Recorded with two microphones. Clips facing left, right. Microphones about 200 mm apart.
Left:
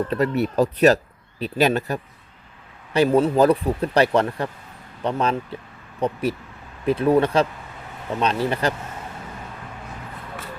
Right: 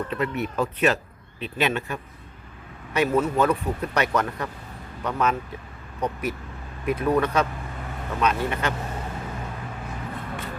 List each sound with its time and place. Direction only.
0.1 s speech: 35° left (ahead or behind)